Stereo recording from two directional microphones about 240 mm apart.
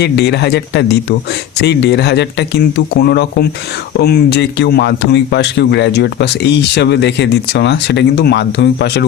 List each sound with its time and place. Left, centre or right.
0.0 s speech: left